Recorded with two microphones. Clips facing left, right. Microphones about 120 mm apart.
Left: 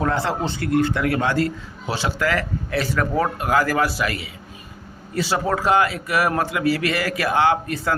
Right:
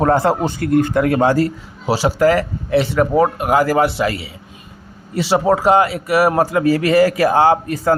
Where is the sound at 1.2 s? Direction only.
35° right (ahead or behind).